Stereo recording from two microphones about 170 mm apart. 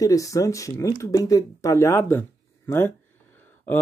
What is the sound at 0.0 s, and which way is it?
Speech, 20° left (ahead or behind).